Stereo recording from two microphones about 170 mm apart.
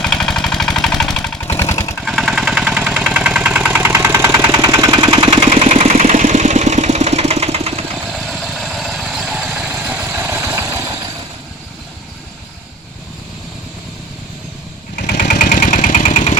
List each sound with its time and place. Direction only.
0.0 s a sound: 5° left (ahead or behind)
2.0 s vehicle: centre (ahead or behind); by 7.9 s 35° right (ahead or behind)
8.2 s vehicle: centre (ahead or behind); by 11.1 s 15° right (ahead or behind)
15.0 s vehicle: 55° left (ahead or behind)